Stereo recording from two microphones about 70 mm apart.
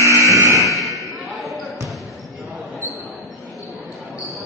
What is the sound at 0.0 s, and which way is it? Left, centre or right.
Buzzer, right.